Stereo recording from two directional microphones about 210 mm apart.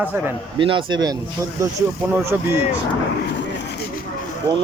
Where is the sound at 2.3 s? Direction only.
10° right (ahead or behind).